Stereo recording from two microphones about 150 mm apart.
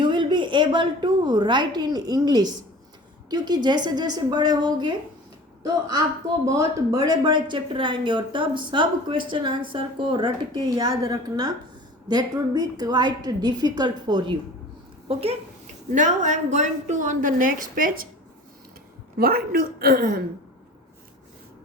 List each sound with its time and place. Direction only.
0.0 s a woman's voice: 30° right (ahead or behind)
6.4 s a woman's voice: 20° right (ahead or behind)
15.0 s speech: 40° right (ahead or behind)
16.0 s a woman's voice: 55° right (ahead or behind)
19.1 s a woman's voice: 85° right